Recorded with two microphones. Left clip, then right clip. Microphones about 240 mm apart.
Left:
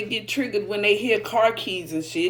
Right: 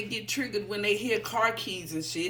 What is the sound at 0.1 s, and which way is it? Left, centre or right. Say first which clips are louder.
Speech: left 7 dB; right.